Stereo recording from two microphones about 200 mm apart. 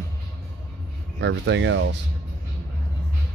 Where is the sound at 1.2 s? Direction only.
65° right (ahead or behind).